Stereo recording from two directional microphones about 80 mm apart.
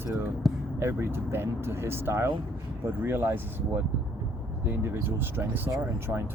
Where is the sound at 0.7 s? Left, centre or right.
Right.